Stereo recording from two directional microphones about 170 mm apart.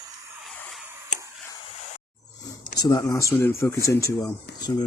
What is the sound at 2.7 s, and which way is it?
Speech, 20° left (ahead or behind).